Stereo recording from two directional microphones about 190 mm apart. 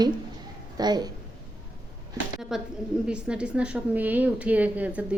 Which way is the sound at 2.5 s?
Centre (ahead or behind).